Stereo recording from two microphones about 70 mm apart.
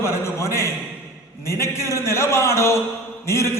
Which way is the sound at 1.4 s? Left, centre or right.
Left.